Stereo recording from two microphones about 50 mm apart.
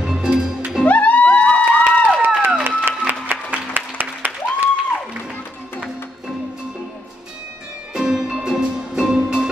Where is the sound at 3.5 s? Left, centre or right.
Right.